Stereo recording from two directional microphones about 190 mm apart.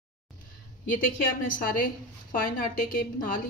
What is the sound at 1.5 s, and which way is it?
A woman's voice, 50° left (ahead or behind).